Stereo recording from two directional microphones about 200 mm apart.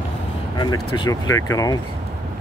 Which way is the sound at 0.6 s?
20° left (ahead or behind).